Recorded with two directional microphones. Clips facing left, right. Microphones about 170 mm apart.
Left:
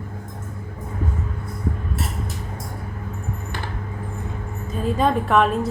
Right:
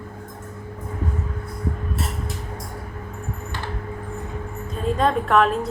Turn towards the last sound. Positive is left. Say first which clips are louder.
# even
turn(degrees=0)  # may be behind; listen again after turning